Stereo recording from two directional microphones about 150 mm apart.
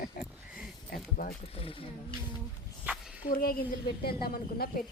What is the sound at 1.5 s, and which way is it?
Speech, 40° left (ahead or behind).